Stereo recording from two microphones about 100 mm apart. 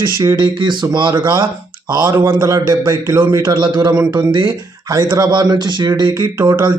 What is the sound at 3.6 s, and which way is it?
A man's voice, 45° right (ahead or behind).